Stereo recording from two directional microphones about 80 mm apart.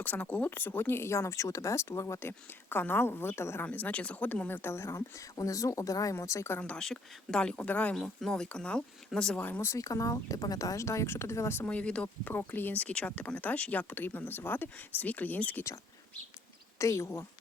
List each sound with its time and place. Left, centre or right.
0.0 s speech: left
3.7 s speech: centre; by 6.6 s left
6.6 s speech: centre
7.9 s speech: centre
9.4 s speech: left
9.7 s speech: left
11.6 s speech: centre
12.0 s speech: left
16.7 s speech: left